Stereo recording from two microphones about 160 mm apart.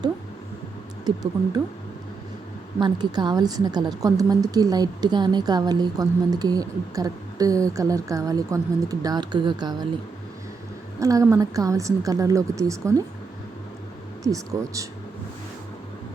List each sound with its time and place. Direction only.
1.0 s a woman's voice: 25° right (ahead or behind)
2.8 s a woman's voice: 25° right (ahead or behind)
11.0 s a woman's voice: 20° right (ahead or behind)
14.3 s a woman's voice: 20° right (ahead or behind)